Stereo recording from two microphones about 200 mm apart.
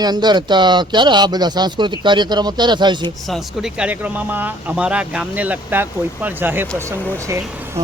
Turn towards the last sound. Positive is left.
turn(degrees=-15)  # may be behind; listen again after turning